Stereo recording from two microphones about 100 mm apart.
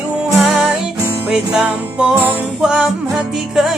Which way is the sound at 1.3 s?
10° right (ahead or behind).